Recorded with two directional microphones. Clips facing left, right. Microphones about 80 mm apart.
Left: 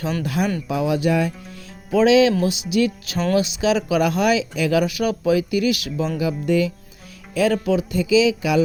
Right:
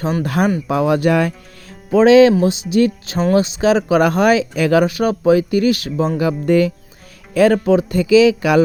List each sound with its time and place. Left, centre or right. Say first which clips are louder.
0.3 s speech: right 6 dB; right
1.9 s speech: right 6 dB; right
6.1 s speech: right 5 dB; right